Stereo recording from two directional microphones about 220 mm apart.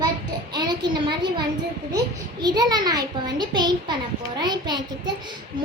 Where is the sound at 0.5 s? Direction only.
20° right (ahead or behind).